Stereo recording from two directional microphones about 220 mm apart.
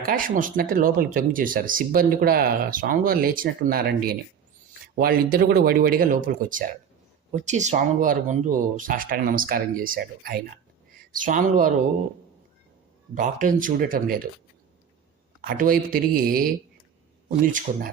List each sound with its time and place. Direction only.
0.0 s speech: 40° right (ahead or behind)
13.1 s speech: 35° right (ahead or behind)
15.4 s speech: 40° right (ahead or behind)